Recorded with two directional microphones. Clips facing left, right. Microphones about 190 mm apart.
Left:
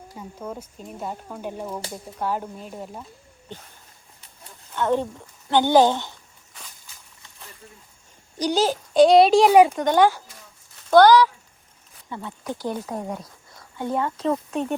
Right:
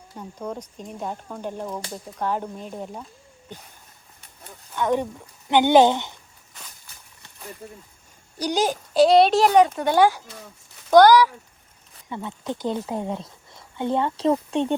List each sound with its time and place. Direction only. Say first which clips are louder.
0.2 s speech: right 2 dB; 5° left (ahead or behind)
4.7 s a woman's voice: even; 10° right (ahead or behind)
8.4 s speech: left 2 dB; 10° right (ahead or behind); by 9.7 s 5° left (ahead or behind)
9.7 s speech: even; 10° right (ahead or behind); by 14.8 s 30° right (ahead or behind)